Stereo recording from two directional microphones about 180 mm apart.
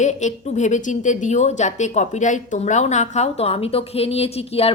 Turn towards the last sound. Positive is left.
turn(degrees=35)  # may be behind; listen again after turning